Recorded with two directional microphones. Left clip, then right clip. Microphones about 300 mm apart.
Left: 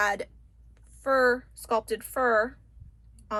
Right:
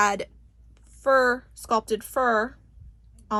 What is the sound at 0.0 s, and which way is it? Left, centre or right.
Speech, right.